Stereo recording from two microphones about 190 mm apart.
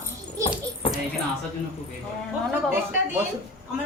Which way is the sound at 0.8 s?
30° left (ahead or behind).